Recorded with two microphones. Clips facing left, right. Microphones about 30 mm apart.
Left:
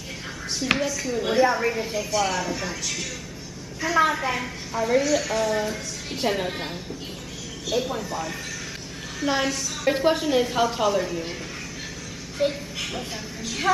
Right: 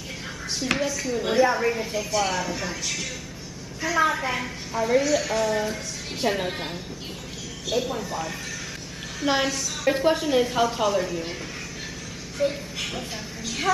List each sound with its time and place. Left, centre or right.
0.7 s a woman's voice: centre
9.2 s a woman's voice: centre
9.5 s a woman's voice: centre
12.4 s speech: left
12.8 s a woman's voice: centre